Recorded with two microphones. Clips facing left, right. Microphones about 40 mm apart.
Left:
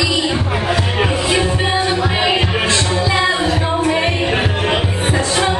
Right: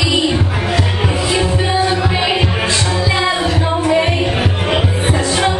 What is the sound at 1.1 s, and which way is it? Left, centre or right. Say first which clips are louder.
Music: even; centre.